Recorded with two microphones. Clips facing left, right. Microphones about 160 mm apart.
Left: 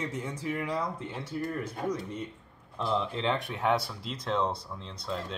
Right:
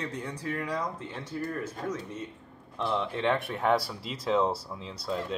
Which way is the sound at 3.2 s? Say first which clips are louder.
Right 2 dB; centre (ahead or behind).